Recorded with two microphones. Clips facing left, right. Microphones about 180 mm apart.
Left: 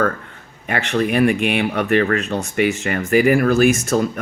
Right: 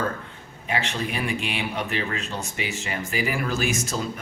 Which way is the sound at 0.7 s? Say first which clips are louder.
Left 9 dB; 60° left (ahead or behind).